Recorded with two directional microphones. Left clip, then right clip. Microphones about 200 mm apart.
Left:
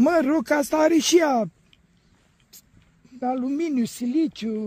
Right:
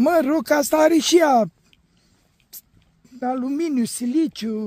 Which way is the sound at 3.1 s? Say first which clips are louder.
Right 1 dB; 40° right (ahead or behind).